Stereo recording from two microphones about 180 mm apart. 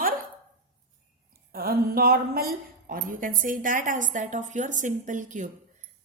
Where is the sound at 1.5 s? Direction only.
55° right (ahead or behind).